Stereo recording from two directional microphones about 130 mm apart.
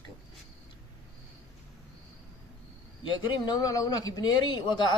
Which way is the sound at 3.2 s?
30° left (ahead or behind).